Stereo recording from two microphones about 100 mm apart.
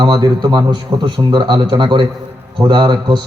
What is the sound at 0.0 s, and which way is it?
A man's voice, 50° right (ahead or behind).